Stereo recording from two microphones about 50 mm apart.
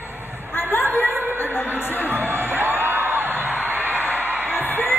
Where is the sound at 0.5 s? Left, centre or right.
Left.